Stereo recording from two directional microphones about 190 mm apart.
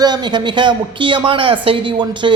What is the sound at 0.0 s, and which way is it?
Speech, 20° right (ahead or behind).